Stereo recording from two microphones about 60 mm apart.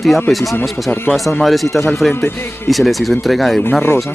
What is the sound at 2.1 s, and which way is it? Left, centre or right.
Speech, left.